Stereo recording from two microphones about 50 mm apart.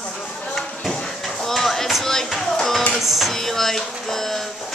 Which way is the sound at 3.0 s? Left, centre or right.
Centre.